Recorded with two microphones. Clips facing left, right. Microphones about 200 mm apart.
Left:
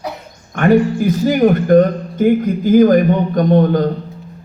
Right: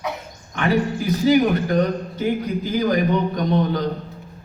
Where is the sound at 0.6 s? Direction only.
50° left (ahead or behind).